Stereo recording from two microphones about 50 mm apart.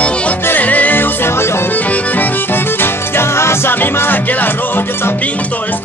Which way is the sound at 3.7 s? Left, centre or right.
Left.